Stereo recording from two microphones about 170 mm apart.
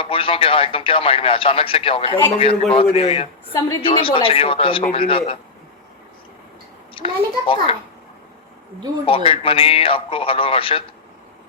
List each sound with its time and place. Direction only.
0.0 s speech: 30° left (ahead or behind)
6.9 s speech: 30° left (ahead or behind)
9.0 s speech: 30° left (ahead or behind)